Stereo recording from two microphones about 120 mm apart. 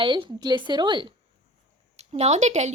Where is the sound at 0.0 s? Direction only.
40° right (ahead or behind).